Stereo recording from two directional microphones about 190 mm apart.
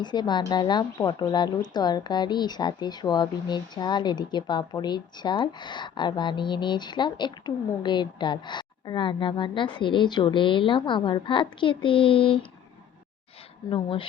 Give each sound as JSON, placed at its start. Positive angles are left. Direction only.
{"t": 0.0, "sound": "speech", "side_deg": 20}
{"t": 13.7, "sound": "speech", "side_deg": 25}